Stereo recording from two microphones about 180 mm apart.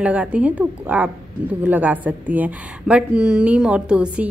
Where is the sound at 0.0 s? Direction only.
5° right (ahead or behind).